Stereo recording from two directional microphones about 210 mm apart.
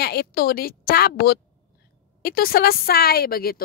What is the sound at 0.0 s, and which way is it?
Speech, 50° left (ahead or behind).